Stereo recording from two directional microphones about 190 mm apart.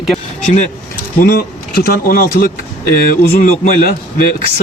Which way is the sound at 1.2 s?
50° left (ahead or behind).